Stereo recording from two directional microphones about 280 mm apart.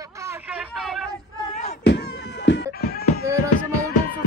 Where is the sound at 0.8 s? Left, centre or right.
Centre.